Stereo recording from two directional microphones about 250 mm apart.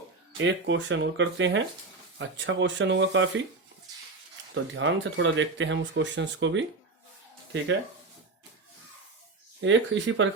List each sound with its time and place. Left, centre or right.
0.3 s speech: right
4.5 s speech: right
9.6 s speech: right